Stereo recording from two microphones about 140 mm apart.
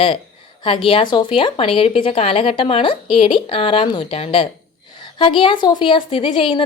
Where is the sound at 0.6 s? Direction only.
40° left (ahead or behind).